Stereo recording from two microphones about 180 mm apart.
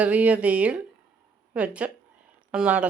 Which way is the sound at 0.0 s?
10° right (ahead or behind).